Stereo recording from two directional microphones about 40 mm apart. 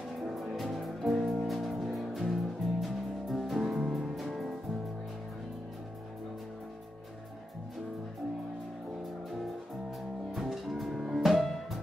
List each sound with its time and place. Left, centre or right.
0.1 s music: centre
9.3 s music: centre